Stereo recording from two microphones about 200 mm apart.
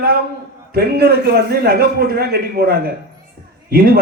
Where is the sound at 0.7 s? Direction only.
50° right (ahead or behind).